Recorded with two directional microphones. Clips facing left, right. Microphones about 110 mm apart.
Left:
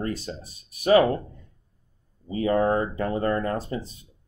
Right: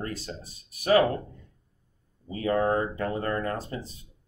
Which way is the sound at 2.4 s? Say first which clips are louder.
Left 3 dB; 20° left (ahead or behind).